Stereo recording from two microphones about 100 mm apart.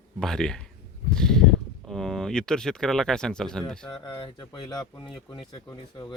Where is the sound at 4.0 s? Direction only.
50° left (ahead or behind).